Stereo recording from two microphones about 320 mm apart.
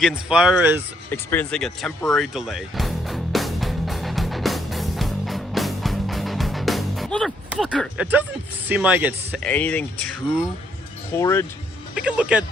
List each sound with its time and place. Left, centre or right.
0.0 s speech: centre
1.1 s music: centre
8.7 s speech: centre
11.9 s speech: centre